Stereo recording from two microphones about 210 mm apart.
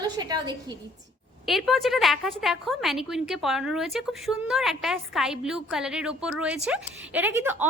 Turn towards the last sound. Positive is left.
turn(degrees=-10)  # may be behind; listen again after turning